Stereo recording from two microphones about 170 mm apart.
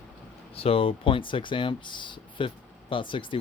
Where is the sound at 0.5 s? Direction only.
35° left (ahead or behind).